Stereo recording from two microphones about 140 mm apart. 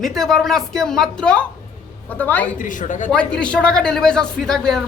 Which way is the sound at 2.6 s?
70° left (ahead or behind).